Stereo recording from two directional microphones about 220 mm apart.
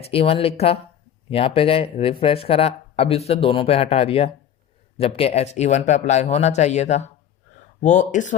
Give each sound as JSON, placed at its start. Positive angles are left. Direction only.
{"t": 0.0, "sound": "speech", "side_deg": 25}